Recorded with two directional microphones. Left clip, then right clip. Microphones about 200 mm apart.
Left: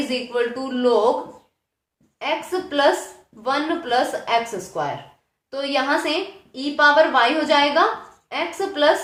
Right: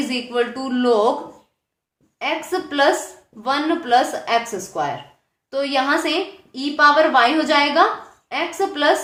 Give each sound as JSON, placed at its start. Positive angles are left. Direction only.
{"t": 0.1, "sound": "a man's voice", "side_deg": -20}
{"t": 2.1, "sound": "a woman's voice", "side_deg": -20}